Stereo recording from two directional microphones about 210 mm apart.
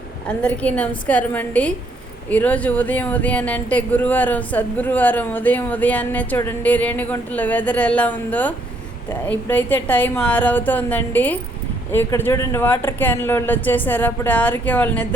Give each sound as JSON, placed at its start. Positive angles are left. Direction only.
{"t": 0.3, "sound": "speech", "side_deg": 5}